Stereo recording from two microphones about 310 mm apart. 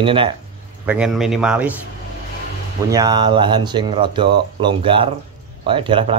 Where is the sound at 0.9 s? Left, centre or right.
Centre.